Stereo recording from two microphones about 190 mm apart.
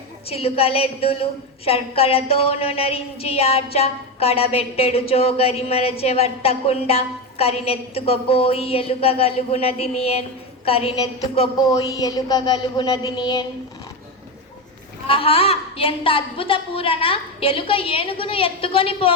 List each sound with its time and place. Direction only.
0.3 s a woman's voice: 30° left (ahead or behind)
11.9 s a woman's voice: 20° left (ahead or behind)
15.0 s a woman's voice: 30° left (ahead or behind)